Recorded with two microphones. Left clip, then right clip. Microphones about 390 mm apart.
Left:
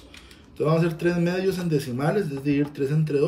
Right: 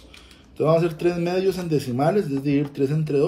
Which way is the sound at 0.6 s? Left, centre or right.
Centre.